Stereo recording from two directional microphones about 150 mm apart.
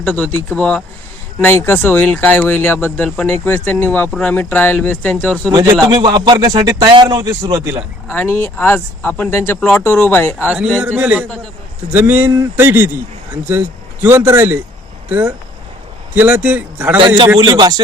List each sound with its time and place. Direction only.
0.0 s speech: 5° left (ahead or behind)
5.5 s speech: 25° right (ahead or behind)
8.1 s speech: 15° left (ahead or behind)
10.5 s speech: 5° right (ahead or behind)
16.1 s speech: 10° right (ahead or behind)
17.3 s speech: 30° right (ahead or behind)